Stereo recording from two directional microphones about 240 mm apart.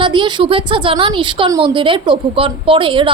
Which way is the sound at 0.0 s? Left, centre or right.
Centre.